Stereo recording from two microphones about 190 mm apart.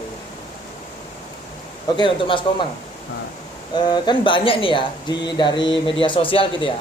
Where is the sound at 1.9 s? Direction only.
25° left (ahead or behind).